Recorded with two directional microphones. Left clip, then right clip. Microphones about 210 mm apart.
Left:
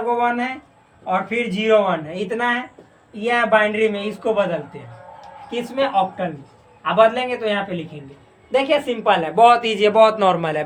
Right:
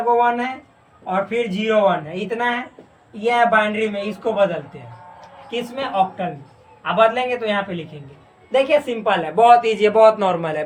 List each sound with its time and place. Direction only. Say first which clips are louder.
0.1 s a woman's voice: right 3 dB; 25° left (ahead or behind)
8.6 s speech: left 2 dB; 35° left (ahead or behind)